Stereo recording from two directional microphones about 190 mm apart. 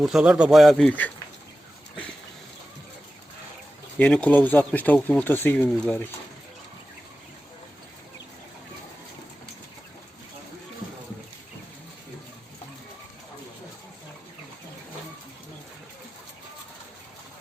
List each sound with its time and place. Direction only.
0.0 s speech: 5° right (ahead or behind)
3.9 s speech: 5° left (ahead or behind)